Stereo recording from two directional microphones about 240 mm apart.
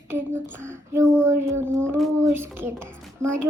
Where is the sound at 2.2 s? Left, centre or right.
Centre.